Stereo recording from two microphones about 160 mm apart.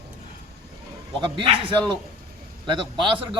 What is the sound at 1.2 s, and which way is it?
A man's voice, 30° right (ahead or behind).